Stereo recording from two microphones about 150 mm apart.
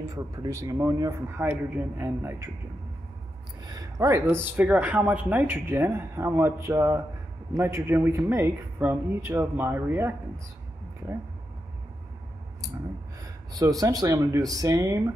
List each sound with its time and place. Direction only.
0.0 s a man's voice: 20° right (ahead or behind)
3.6 s speech: 25° right (ahead or behind)
13.2 s a man's voice: 25° right (ahead or behind)